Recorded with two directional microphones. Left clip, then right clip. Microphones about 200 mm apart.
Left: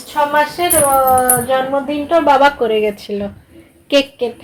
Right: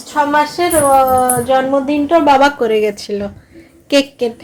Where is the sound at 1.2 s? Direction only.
20° right (ahead or behind).